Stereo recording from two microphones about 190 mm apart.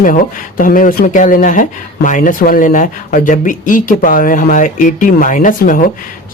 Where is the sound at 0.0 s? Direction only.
45° left (ahead or behind).